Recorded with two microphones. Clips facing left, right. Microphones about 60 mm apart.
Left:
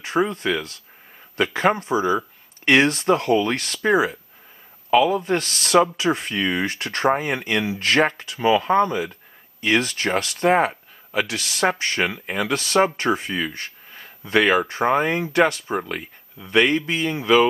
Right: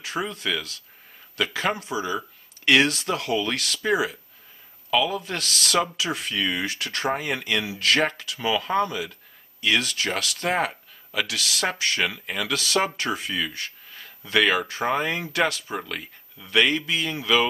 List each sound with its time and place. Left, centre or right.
0.0 s speech: left
13.9 s a sound: left
14.4 s speech: centre